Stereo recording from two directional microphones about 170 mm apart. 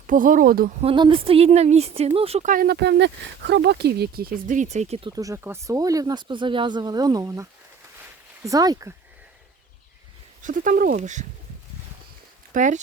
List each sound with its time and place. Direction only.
0.1 s speech: 50° right (ahead or behind)
0.8 s a woman's voice: 30° right (ahead or behind)
2.5 s speech: 65° right (ahead or behind); by 8.9 s 20° right (ahead or behind)
10.4 s speech: 50° right (ahead or behind)
12.5 s speech: 45° right (ahead or behind)